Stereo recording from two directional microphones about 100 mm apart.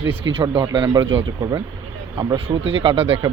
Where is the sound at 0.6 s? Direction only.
55° right (ahead or behind).